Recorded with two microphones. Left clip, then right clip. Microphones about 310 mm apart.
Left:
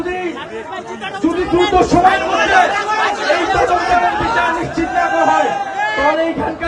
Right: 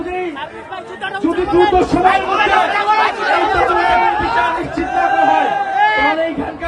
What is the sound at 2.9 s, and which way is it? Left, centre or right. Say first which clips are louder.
Chatter: right 1 dB; right.